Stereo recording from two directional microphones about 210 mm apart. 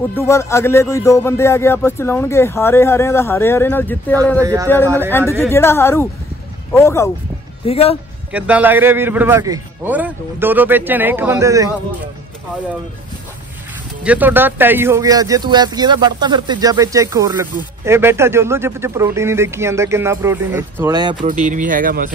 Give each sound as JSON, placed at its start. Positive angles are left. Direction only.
{"t": 0.1, "sound": "speech", "side_deg": 15}
{"t": 4.4, "sound": "speech", "side_deg": -15}
{"t": 5.5, "sound": "speech", "side_deg": 15}
{"t": 7.6, "sound": "speech", "side_deg": 30}
{"t": 8.3, "sound": "speech", "side_deg": -5}
{"t": 14.0, "sound": "speech", "side_deg": -10}
{"t": 21.3, "sound": "speech", "side_deg": -35}